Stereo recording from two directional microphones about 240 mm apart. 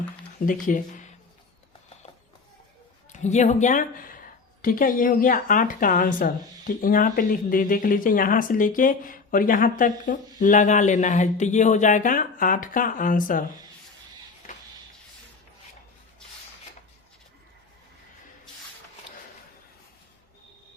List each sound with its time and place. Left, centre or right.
0.3 s speech: left
3.1 s speech: left